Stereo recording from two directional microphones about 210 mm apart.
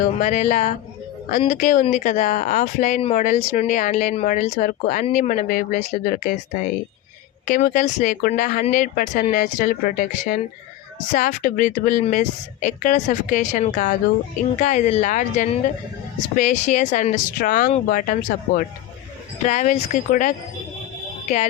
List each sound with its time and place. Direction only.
0.2 s speech: 35° left (ahead or behind)
7.4 s speech: 40° left (ahead or behind)